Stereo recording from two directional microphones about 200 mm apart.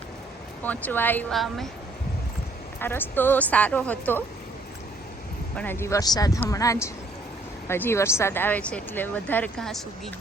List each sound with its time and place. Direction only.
0.6 s speech: 10° left (ahead or behind)
2.8 s speech: 10° left (ahead or behind)
5.5 s speech: 10° left (ahead or behind)